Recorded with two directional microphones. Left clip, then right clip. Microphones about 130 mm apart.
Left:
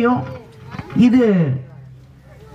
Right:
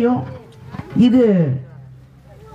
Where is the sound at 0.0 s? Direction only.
25° left (ahead or behind).